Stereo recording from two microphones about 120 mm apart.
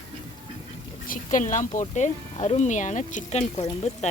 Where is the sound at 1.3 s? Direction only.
90° left.